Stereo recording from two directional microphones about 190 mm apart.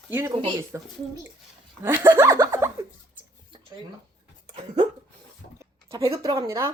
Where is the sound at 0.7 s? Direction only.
15° right (ahead or behind).